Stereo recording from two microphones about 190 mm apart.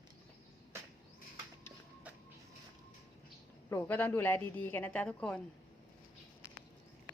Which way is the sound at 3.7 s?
15° left (ahead or behind).